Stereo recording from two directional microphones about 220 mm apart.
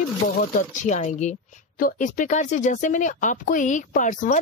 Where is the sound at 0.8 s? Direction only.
35° left (ahead or behind).